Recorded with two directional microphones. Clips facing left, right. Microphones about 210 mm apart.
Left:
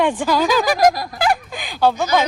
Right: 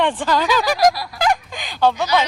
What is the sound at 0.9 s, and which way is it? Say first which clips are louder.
Honk: left 3 dB; 45° left (ahead or behind).